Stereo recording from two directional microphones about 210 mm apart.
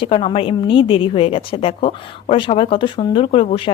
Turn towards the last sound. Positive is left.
turn(degrees=25)  # may be behind; listen again after turning